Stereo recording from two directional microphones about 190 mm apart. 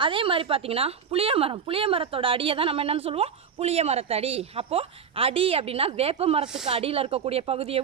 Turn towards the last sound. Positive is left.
turn(degrees=-30)  # may be behind; listen again after turning